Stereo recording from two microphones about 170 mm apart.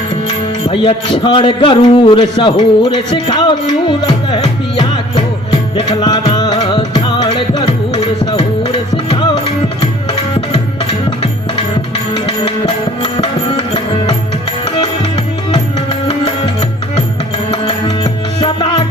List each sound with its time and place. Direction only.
0.7 s a man's voice: 30° left (ahead or behind)
5.7 s music: 25° left (ahead or behind)
12.1 s music: 35° left (ahead or behind)
17.5 s music: 30° left (ahead or behind)